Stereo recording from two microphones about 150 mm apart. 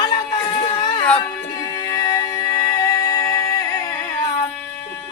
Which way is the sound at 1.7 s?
25° left (ahead or behind).